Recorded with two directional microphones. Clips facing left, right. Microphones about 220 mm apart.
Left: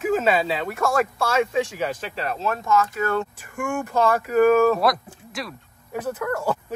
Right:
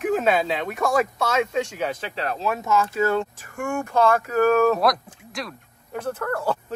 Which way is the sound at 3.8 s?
10° left (ahead or behind).